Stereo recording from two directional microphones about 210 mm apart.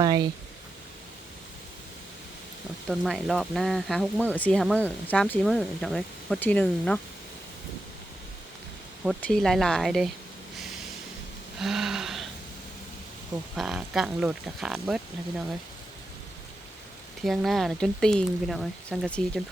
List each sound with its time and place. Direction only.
0.0 s speech: 20° right (ahead or behind)
2.9 s speech: centre (ahead or behind)
9.0 s speech: centre (ahead or behind)
11.6 s a sound: centre (ahead or behind)
13.6 s speech: centre (ahead or behind)
17.2 s speech: centre (ahead or behind)